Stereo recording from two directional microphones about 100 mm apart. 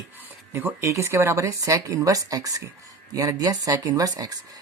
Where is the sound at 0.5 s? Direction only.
25° right (ahead or behind).